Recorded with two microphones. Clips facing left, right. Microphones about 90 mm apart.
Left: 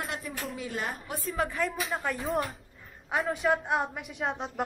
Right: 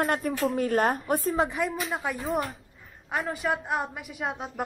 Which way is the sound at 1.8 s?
Centre (ahead or behind).